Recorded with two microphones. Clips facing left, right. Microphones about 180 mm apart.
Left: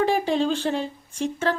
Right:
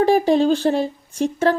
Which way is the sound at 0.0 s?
40° right (ahead or behind).